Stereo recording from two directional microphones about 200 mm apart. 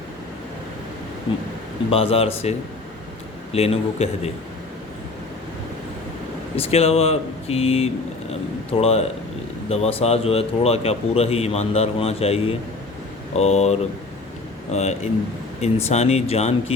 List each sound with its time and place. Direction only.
1.9 s speech: 30° left (ahead or behind)
6.6 s speech: 30° left (ahead or behind)